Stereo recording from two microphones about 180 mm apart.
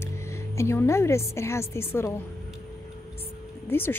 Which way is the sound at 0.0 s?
15° left (ahead or behind).